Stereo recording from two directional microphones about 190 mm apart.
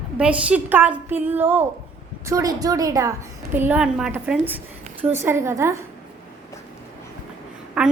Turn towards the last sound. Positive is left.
turn(degrees=-5)  # may be behind; listen again after turning